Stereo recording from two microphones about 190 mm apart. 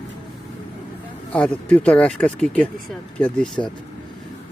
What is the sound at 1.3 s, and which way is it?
Speech, 5° left (ahead or behind).